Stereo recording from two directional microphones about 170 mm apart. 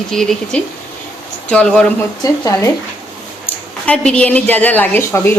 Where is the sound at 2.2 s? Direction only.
20° left (ahead or behind).